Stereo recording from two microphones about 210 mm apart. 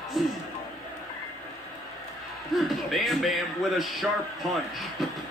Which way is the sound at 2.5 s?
Centre (ahead or behind).